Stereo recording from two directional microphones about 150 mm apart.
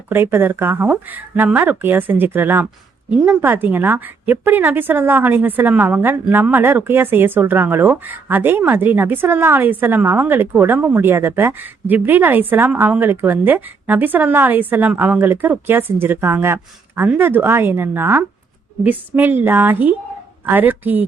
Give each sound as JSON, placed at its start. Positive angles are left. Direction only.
{"t": 0.1, "sound": "a woman's voice", "side_deg": -15}